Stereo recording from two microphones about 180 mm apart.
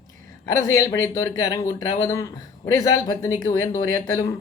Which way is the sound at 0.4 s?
15° left (ahead or behind).